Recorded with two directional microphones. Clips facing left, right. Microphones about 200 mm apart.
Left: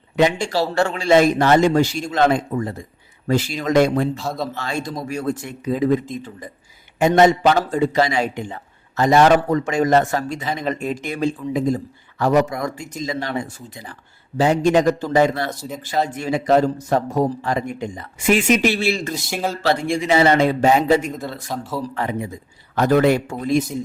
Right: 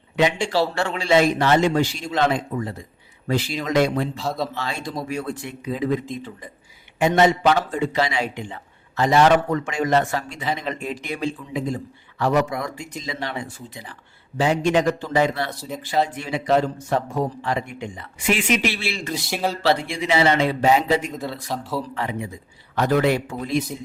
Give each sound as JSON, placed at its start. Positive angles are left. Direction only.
{"t": 0.2, "sound": "speech", "side_deg": 40}
{"t": 4.2, "sound": "speech", "side_deg": -5}
{"t": 4.5, "sound": "a man's voice", "side_deg": 45}
{"t": 19.3, "sound": "speech", "side_deg": 0}
{"t": 19.8, "sound": "speech", "side_deg": 45}
{"t": 21.5, "sound": "speech", "side_deg": 5}
{"t": 21.9, "sound": "speech", "side_deg": 45}